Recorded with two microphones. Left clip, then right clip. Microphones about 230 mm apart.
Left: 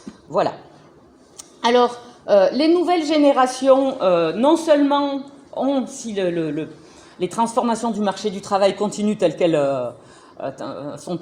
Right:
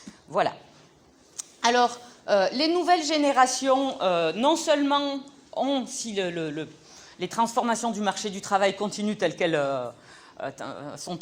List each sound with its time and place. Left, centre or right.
0.3 s speech: right
9.6 s speech: right
10.4 s speech: right